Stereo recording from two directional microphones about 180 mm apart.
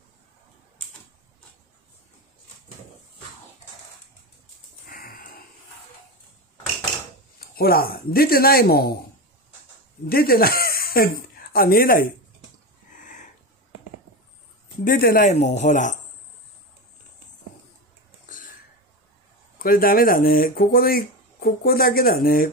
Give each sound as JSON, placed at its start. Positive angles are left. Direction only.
{"t": 4.8, "sound": "wheeze", "side_deg": 55}
{"t": 7.3, "sound": "speech", "side_deg": 55}
{"t": 10.0, "sound": "speech", "side_deg": 55}
{"t": 13.0, "sound": "a sound", "side_deg": 45}
{"t": 14.9, "sound": "speech", "side_deg": 55}
{"t": 15.3, "sound": "speech", "side_deg": 40}
{"t": 19.6, "sound": "speech", "side_deg": 55}